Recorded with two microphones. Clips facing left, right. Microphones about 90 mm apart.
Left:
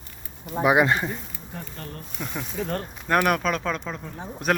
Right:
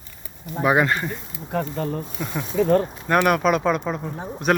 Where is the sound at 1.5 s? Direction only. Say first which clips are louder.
Right 14 dB; 90° right.